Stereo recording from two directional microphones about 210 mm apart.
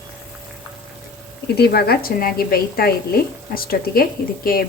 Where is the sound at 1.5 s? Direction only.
50° left (ahead or behind).